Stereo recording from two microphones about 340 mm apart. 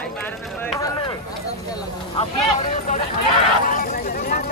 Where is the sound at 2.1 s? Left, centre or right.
Centre.